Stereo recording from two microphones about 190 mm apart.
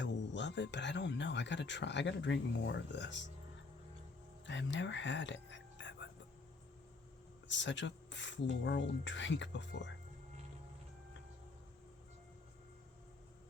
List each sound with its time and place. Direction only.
0.0 s speech: 70° left (ahead or behind)
4.4 s speech: 75° left (ahead or behind)
7.4 s speech: 75° left (ahead or behind)